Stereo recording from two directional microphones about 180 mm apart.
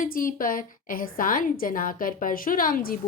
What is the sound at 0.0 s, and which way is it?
A woman's voice, 50° left (ahead or behind).